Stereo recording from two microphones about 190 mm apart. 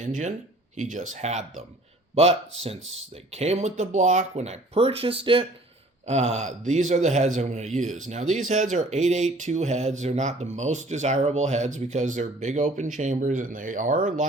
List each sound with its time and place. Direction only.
0.0 s speech: 40° right (ahead or behind)